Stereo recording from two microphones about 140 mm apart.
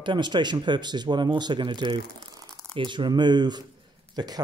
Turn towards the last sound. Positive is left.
turn(degrees=-30)  # may be behind; listen again after turning